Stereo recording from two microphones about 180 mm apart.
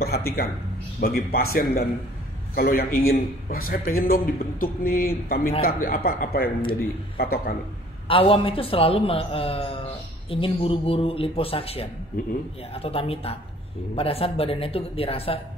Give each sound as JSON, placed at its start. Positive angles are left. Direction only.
{"t": 0.0, "sound": "speech", "side_deg": 60}
{"t": 8.1, "sound": "a man's voice", "side_deg": 30}